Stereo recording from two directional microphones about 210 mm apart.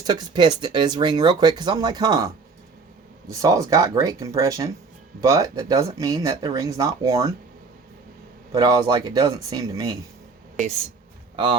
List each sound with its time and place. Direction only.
0.0 s speech: 20° right (ahead or behind)
8.5 s speech: 20° right (ahead or behind)